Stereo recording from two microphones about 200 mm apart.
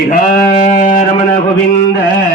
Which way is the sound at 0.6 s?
45° left (ahead or behind).